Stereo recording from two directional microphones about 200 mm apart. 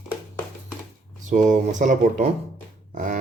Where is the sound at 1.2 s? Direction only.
40° right (ahead or behind).